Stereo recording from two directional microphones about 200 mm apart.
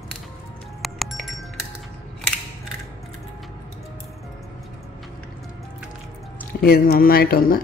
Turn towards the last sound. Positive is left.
turn(degrees=50)  # may be behind; listen again after turning